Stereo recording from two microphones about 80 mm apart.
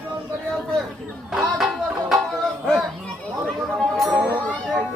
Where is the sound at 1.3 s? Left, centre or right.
Centre.